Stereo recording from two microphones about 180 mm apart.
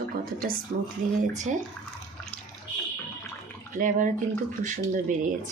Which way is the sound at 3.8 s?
45° right (ahead or behind).